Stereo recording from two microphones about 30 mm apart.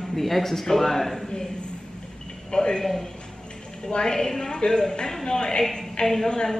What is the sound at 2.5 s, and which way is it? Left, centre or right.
Speech, left.